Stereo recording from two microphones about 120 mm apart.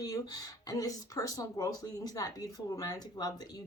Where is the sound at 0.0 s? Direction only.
30° left (ahead or behind).